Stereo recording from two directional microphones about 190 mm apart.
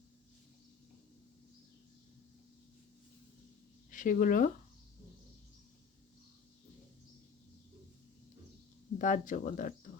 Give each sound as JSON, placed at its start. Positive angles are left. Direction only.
{"t": 3.9, "sound": "speech", "side_deg": 45}
{"t": 9.0, "sound": "speech", "side_deg": 40}